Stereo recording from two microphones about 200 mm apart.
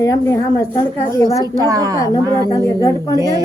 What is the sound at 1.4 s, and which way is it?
Speech, 20° right (ahead or behind).